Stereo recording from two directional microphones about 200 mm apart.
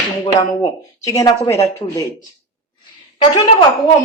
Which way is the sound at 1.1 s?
20° left (ahead or behind).